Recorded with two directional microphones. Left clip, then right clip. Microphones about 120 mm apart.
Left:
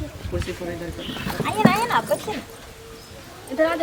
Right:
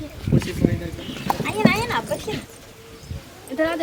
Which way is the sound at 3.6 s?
5° right (ahead or behind).